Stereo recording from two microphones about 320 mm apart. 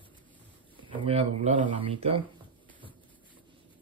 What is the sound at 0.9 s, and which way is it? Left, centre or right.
Speech, centre.